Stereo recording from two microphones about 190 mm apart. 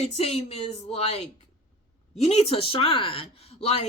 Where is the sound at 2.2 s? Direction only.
35° left (ahead or behind).